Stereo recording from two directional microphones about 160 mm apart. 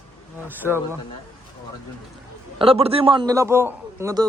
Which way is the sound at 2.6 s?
35° right (ahead or behind).